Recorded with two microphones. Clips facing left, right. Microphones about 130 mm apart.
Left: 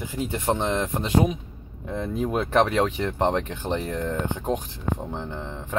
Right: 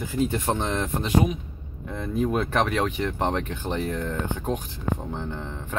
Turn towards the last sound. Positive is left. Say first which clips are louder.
# even
turn(degrees=25)  # may be behind; listen again after turning